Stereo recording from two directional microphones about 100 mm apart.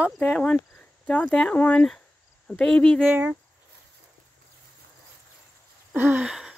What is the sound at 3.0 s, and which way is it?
Speech, 20° right (ahead or behind).